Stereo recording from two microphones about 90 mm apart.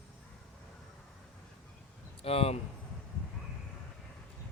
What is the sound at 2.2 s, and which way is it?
Speech, 90° left.